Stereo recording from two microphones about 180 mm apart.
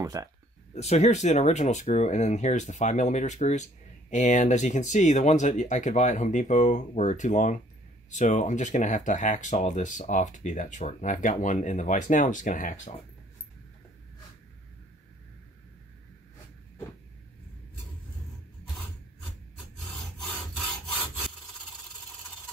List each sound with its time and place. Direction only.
0.0 s speech: 20° right (ahead or behind)
0.7 s speech: 40° left (ahead or behind)